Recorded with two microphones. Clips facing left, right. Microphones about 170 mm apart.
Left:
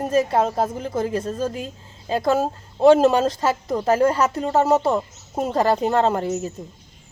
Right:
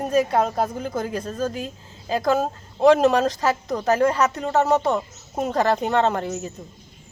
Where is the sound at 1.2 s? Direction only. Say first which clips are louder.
Left 1 dB; 25° left (ahead or behind).